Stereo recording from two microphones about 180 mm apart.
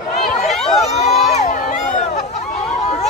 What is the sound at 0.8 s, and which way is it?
Crowd, 35° left (ahead or behind).